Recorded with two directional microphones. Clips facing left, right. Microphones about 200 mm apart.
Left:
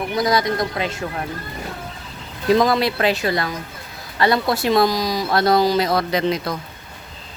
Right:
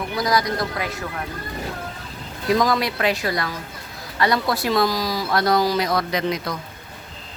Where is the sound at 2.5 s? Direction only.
25° left (ahead or behind).